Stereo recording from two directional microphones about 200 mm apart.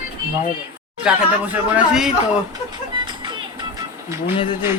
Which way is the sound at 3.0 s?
20° right (ahead or behind).